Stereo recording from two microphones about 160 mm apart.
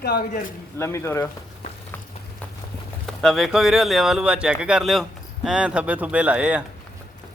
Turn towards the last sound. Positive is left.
turn(degrees=-10)  # may be behind; listen again after turning